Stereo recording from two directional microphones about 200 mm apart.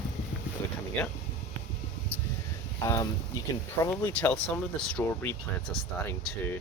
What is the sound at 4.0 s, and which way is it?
Speech, 10° left (ahead or behind).